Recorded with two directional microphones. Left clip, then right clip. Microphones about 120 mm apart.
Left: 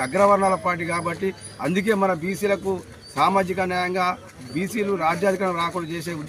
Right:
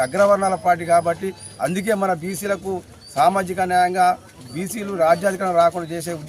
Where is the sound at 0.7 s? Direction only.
40° right (ahead or behind).